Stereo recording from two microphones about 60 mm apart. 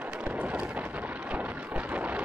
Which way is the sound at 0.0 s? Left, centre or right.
Right.